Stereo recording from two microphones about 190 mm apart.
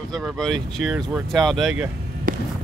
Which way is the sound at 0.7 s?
5° right (ahead or behind).